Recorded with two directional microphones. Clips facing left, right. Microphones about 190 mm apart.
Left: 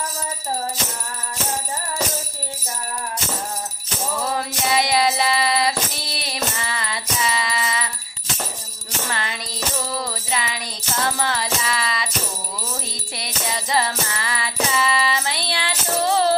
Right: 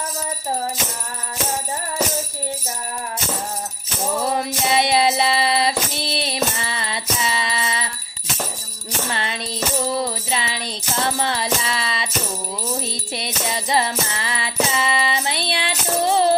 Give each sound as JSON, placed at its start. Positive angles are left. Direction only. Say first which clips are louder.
{"t": 4.2, "sound": "music", "louder": "right 2 dB", "side_deg": -20}
{"t": 9.0, "sound": "music", "louder": "right 2 dB", "side_deg": -25}